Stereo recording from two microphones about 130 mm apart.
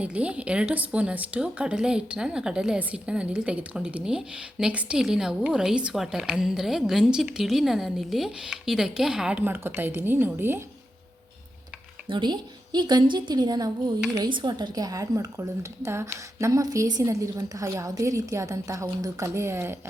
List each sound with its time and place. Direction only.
0.0 s speech: 10° right (ahead or behind)
12.0 s a woman's voice: 35° right (ahead or behind); by 19.7 s 20° right (ahead or behind)